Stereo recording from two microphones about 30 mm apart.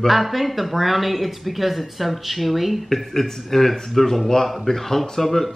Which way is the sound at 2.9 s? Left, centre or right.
Centre.